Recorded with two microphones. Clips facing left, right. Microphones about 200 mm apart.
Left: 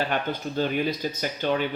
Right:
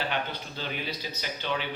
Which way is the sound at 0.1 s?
50° left (ahead or behind).